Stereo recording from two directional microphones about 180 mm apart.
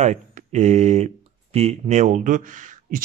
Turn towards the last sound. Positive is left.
turn(degrees=-50)  # may be behind; listen again after turning